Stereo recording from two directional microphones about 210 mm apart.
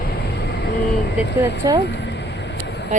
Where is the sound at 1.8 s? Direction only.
55° left (ahead or behind).